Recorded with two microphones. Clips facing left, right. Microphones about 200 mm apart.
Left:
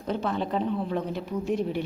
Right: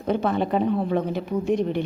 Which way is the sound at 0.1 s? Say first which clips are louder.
Right 5 dB; 60° right (ahead or behind).